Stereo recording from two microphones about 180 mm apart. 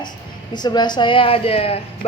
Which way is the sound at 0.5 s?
25° left (ahead or behind).